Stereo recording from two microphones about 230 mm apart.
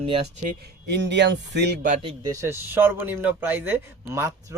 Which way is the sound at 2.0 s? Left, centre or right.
Centre.